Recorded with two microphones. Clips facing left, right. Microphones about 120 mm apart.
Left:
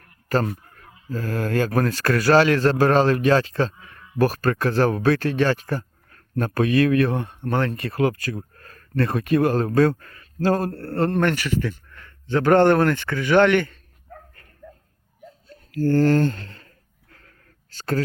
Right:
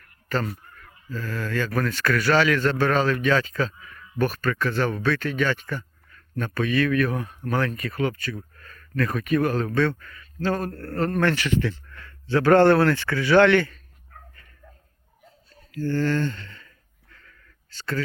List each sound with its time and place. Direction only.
0.0 s honk: 40° left (ahead or behind)
1.1 s a man's voice: 45° left (ahead or behind)
6.1 s speech: 50° left (ahead or behind); by 11.3 s 30° left (ahead or behind)
11.3 s speech: 10° left (ahead or behind)
15.4 s a sound: 45° left (ahead or behind)